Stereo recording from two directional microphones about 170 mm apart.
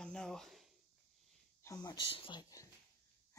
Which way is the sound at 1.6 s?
20° left (ahead or behind).